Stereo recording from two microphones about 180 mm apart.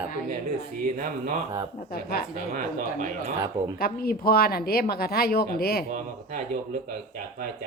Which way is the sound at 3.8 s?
55° left (ahead or behind).